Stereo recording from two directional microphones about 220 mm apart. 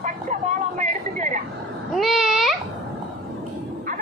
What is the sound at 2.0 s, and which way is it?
Babbling, centre (ahead or behind).